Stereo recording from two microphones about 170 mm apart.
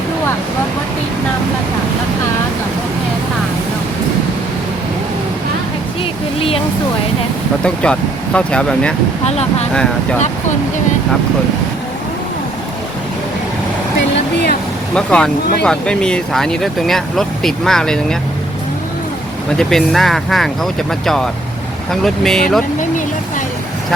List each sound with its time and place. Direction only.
7.6 s speech: 5° left (ahead or behind)
9.2 s speech: 40° left (ahead or behind)
14.9 s speech: 5° left (ahead or behind)
19.5 s speech: centre (ahead or behind)
22.0 s speech: 5° left (ahead or behind)